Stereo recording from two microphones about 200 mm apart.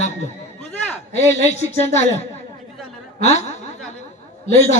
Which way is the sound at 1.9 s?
35° left (ahead or behind).